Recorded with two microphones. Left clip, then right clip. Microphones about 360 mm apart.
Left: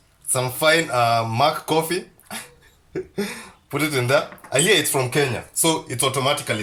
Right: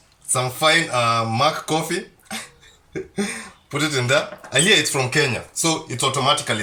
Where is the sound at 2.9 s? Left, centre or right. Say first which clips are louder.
Even; centre.